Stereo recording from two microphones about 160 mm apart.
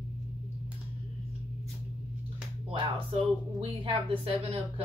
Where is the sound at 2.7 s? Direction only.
35° right (ahead or behind).